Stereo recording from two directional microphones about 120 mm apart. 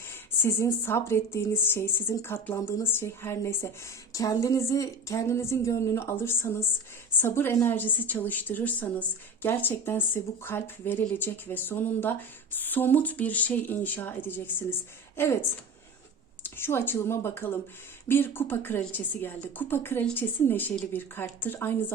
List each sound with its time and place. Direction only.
0.1 s a woman's voice: 20° left (ahead or behind)